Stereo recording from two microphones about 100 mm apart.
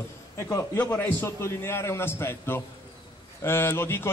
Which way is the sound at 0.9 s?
20° left (ahead or behind).